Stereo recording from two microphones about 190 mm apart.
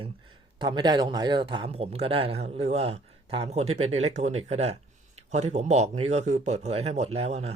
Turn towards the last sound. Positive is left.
turn(degrees=-35)  # may be behind; listen again after turning